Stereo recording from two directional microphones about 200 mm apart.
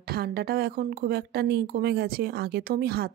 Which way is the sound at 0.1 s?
50° right (ahead or behind).